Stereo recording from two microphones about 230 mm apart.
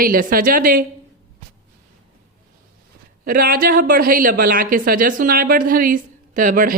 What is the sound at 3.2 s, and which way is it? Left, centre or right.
A woman's voice, right.